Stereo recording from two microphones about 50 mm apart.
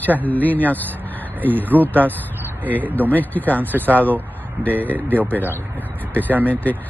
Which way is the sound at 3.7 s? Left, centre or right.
Right.